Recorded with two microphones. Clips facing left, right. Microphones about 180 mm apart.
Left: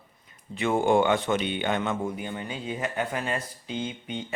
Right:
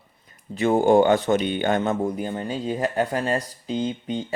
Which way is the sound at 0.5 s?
40° right (ahead or behind).